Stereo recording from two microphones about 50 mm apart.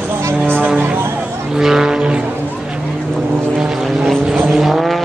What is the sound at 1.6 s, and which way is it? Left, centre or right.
Vehicle, centre.